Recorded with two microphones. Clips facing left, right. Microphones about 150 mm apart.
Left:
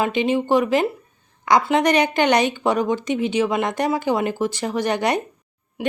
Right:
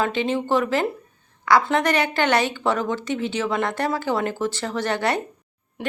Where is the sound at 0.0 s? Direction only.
15° left (ahead or behind).